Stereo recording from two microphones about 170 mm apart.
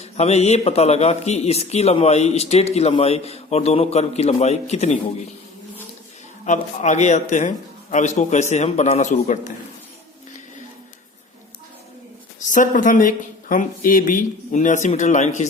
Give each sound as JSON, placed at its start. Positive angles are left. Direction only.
{"t": 0.0, "sound": "a man's voice", "side_deg": 40}
{"t": 6.4, "sound": "speech", "side_deg": 45}
{"t": 12.5, "sound": "speech", "side_deg": 50}